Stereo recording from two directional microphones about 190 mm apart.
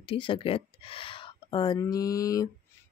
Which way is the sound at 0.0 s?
25° left (ahead or behind).